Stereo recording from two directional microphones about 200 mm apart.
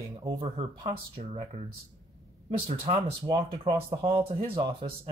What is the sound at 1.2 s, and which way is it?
Speech, 35° right (ahead or behind).